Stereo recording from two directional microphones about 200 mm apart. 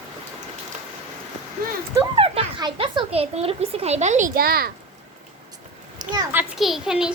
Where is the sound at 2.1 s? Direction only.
25° right (ahead or behind); by 4.7 s 50° right (ahead or behind).